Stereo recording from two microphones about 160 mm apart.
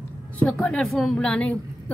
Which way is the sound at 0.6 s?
5° left (ahead or behind).